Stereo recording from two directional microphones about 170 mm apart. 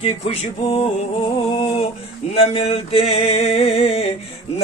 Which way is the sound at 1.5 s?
30° left (ahead or behind).